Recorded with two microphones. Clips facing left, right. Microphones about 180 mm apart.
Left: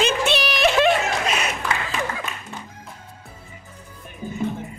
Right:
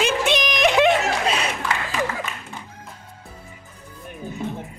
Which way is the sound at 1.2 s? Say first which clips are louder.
Right 1 dB; 30° right (ahead or behind).